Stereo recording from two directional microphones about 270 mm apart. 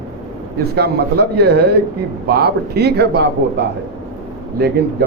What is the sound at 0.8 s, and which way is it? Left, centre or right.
A man's voice, right.